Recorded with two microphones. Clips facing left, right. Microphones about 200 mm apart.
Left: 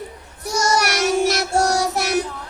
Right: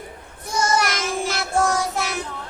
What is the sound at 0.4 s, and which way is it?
Child singing, 75° left (ahead or behind).